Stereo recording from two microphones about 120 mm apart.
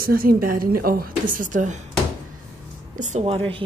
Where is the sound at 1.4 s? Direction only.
90° right.